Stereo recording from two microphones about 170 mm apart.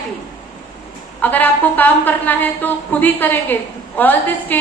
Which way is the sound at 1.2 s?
10° left (ahead or behind).